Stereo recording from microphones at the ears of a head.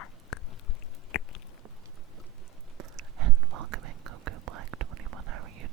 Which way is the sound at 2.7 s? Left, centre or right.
Right.